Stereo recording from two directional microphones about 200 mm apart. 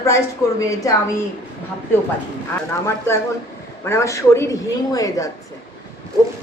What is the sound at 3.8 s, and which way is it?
A woman's voice, 15° left (ahead or behind).